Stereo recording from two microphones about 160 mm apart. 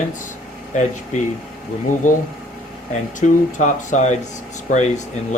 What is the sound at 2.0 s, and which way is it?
Speech, 50° left (ahead or behind).